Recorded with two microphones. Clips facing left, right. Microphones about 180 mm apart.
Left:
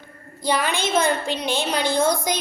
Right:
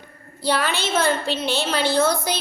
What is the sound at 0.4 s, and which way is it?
A woman's voice, 10° left (ahead or behind).